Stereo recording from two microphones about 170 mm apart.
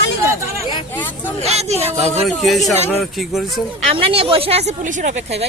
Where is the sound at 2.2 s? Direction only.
Centre (ahead or behind).